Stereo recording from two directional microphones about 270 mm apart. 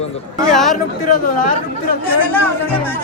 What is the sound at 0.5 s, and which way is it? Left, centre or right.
Speech, centre.